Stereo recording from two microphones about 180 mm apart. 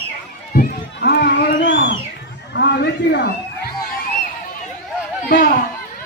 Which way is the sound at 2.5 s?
70° left (ahead or behind).